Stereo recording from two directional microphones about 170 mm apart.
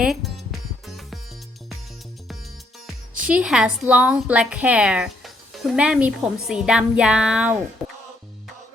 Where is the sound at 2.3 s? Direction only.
Centre (ahead or behind).